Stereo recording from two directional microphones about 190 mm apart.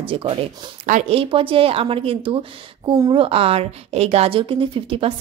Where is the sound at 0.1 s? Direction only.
30° right (ahead or behind).